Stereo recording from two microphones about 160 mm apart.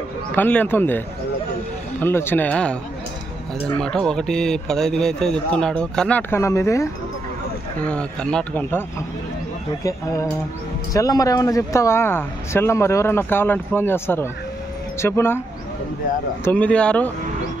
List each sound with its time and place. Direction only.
0.4 s speech: 10° left (ahead or behind)
7.8 s speech: 5° left (ahead or behind)
10.9 s speech: 20° left (ahead or behind)
16.4 s speech: 10° left (ahead or behind)